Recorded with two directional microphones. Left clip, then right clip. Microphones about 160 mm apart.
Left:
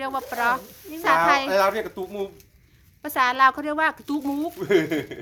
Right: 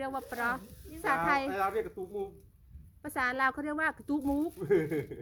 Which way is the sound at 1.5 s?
25° left (ahead or behind).